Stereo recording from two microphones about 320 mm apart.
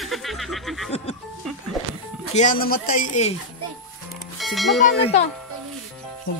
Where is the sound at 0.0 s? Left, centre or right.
Centre.